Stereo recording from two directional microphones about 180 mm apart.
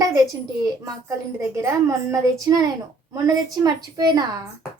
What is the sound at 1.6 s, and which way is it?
A child's voice, 15° right (ahead or behind).